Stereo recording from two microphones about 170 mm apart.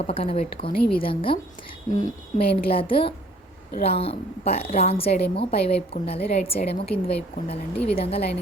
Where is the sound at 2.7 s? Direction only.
30° left (ahead or behind).